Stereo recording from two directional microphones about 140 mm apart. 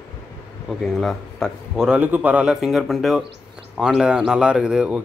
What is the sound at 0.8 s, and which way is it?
A man's voice, centre (ahead or behind).